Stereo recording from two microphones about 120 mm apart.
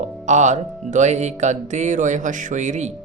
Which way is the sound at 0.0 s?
85° right.